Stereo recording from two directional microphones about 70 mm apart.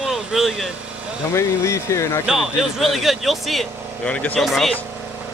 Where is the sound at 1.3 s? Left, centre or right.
Left.